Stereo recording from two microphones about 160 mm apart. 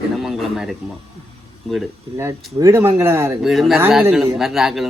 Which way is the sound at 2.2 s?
20° right (ahead or behind).